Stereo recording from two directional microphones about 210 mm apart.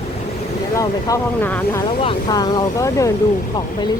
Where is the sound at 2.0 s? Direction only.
20° left (ahead or behind).